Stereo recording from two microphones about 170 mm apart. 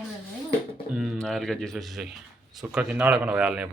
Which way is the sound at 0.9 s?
Centre (ahead or behind).